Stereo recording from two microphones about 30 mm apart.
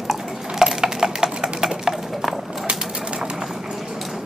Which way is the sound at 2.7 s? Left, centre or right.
Right.